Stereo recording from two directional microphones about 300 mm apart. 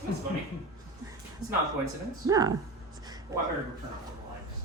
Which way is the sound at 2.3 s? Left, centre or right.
Centre.